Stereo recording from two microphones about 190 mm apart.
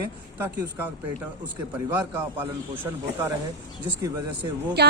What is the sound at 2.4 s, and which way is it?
Speech, 10° right (ahead or behind).